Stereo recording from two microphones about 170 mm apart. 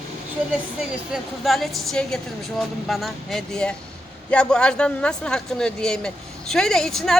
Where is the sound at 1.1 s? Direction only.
Centre (ahead or behind).